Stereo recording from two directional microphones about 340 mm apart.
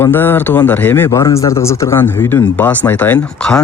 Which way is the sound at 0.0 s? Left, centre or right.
Centre.